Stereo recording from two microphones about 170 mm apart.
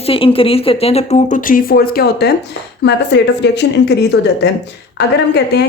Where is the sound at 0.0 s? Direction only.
30° left (ahead or behind); by 2.3 s 70° left (ahead or behind).